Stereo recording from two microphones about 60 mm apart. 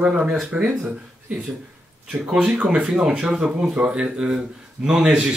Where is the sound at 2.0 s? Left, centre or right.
Centre.